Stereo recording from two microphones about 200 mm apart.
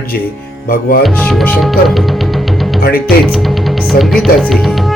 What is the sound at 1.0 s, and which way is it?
Music, centre (ahead or behind).